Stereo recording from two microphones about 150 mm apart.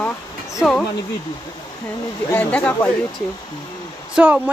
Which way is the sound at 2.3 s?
10° left (ahead or behind).